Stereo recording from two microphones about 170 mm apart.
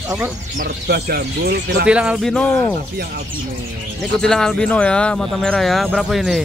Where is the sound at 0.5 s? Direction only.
70° right (ahead or behind).